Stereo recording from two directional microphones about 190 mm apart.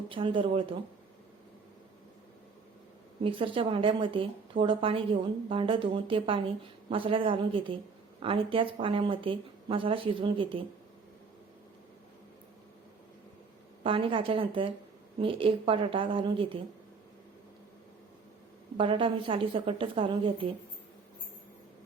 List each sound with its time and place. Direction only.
0.1 s a woman's voice: 25° right (ahead or behind)
3.2 s a woman's voice: 30° right (ahead or behind)
13.8 s a woman's voice: 25° right (ahead or behind)
18.8 s a woman's voice: 30° right (ahead or behind)